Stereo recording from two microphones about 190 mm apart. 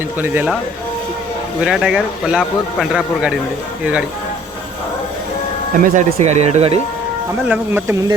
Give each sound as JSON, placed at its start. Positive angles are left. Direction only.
{"t": 0.2, "sound": "speech", "side_deg": -10}
{"t": 1.6, "sound": "a man's voice", "side_deg": 0}
{"t": 5.8, "sound": "speech", "side_deg": -40}
{"t": 7.4, "sound": "speech", "side_deg": -10}